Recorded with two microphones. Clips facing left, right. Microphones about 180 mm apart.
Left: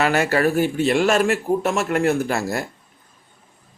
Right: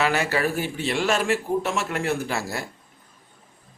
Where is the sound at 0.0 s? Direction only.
50° left (ahead or behind).